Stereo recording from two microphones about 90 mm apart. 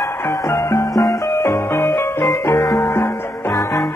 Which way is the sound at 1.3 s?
30° left (ahead or behind).